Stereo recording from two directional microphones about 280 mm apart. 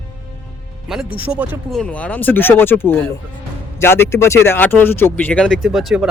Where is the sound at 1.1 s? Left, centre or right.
Centre.